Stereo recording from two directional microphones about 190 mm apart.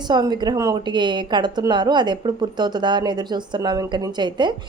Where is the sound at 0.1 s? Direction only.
20° right (ahead or behind).